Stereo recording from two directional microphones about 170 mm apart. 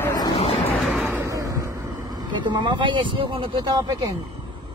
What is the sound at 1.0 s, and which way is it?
Vehicle, 15° right (ahead or behind).